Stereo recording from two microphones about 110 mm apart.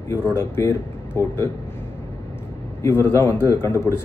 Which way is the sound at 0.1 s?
20° left (ahead or behind).